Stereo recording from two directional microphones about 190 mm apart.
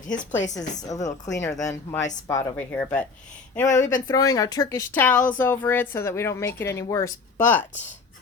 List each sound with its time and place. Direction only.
0.3 s a woman's voice: 20° left (ahead or behind)